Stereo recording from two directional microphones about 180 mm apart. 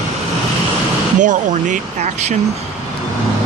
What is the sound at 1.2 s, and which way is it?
Speech, 45° right (ahead or behind).